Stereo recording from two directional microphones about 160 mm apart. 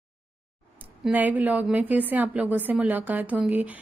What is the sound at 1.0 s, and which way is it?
A woman's voice, 10° right (ahead or behind).